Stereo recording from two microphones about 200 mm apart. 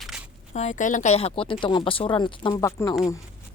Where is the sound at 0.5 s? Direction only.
35° left (ahead or behind); by 2.9 s 15° left (ahead or behind).